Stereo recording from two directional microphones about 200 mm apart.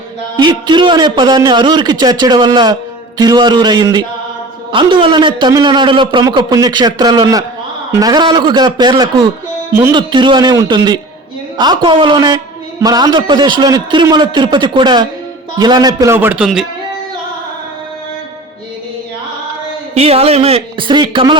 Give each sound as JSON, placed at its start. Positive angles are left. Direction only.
{"t": 0.3, "sound": "a man's voice", "side_deg": -25}
{"t": 19.9, "sound": "a man's voice", "side_deg": -30}